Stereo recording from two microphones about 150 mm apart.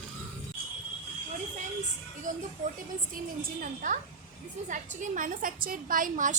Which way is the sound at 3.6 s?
60° right (ahead or behind).